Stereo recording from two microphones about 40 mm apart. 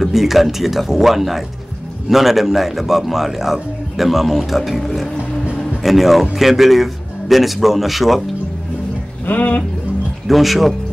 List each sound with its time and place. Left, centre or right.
0.0 s a man's voice: centre
9.2 s speech: left
10.2 s a man's voice: centre